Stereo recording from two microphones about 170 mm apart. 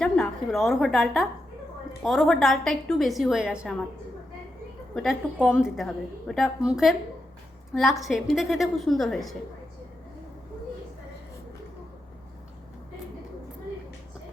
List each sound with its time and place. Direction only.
0.0 s a woman's voice: centre (ahead or behind)
5.5 s a woman's voice: 5° right (ahead or behind)